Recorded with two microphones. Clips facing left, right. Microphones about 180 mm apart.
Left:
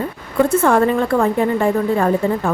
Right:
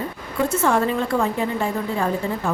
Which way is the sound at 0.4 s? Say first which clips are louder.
Left 5 dB; 55° left (ahead or behind).